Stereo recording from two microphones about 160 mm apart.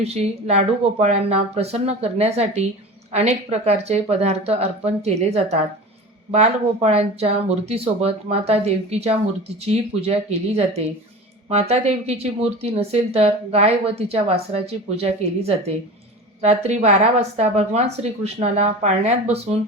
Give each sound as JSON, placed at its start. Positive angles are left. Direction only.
{"t": 0.0, "sound": "a woman's voice", "side_deg": -40}